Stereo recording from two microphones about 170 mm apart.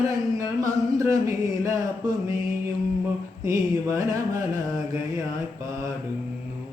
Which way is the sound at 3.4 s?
20° right (ahead or behind).